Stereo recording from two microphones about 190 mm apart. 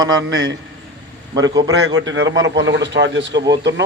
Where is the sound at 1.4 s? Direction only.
20° right (ahead or behind).